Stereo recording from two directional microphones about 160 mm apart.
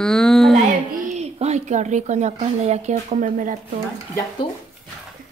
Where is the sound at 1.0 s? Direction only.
45° right (ahead or behind).